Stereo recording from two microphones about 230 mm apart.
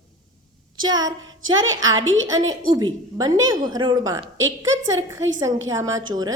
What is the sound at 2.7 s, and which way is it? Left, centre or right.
A woman's voice, centre.